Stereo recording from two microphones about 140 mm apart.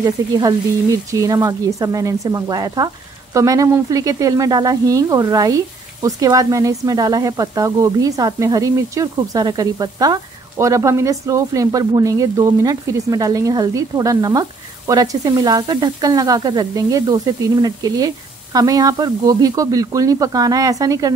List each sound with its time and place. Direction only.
0.0 s speech: 25° right (ahead or behind)